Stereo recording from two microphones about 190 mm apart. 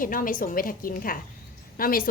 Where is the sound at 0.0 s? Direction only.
45° left (ahead or behind).